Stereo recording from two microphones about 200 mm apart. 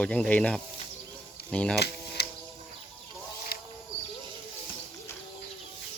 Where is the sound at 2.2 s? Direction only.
55° left (ahead or behind).